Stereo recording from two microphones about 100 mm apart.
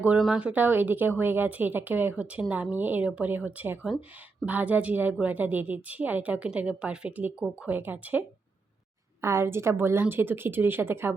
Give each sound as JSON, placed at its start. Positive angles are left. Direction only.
{"t": 0.2, "sound": "a woman's voice", "side_deg": -10}
{"t": 9.2, "sound": "a woman's voice", "side_deg": -25}